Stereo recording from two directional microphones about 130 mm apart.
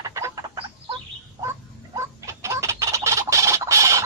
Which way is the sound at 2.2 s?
20° right (ahead or behind).